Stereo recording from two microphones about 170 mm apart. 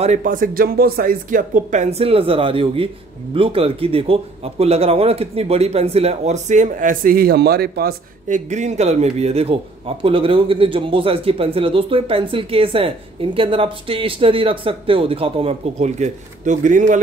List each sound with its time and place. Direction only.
0.0 s a man's voice: 45° right (ahead or behind); by 8.4 s 65° right (ahead or behind)
8.5 s a man's voice: 45° right (ahead or behind)